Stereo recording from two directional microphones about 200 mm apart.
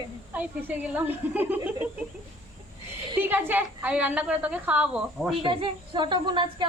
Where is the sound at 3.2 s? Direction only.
10° right (ahead or behind).